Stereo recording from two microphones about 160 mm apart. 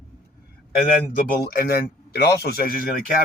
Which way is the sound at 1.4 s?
70° left (ahead or behind).